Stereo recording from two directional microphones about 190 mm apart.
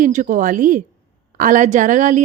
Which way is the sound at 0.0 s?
40° right (ahead or behind).